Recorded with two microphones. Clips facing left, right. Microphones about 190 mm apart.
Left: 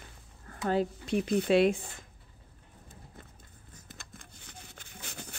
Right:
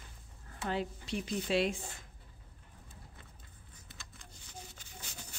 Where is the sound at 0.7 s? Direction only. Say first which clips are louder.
Left 7 dB; 45° left (ahead or behind).